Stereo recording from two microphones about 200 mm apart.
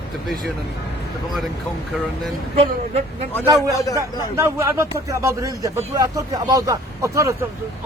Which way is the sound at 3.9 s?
15° right (ahead or behind).